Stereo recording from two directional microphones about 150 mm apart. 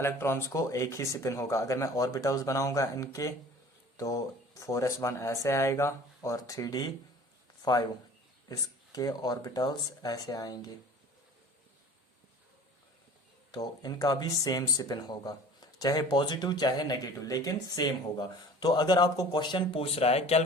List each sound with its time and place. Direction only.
0.0 s speech: 15° left (ahead or behind)
13.5 s speech: 25° left (ahead or behind); by 20.4 s 45° left (ahead or behind)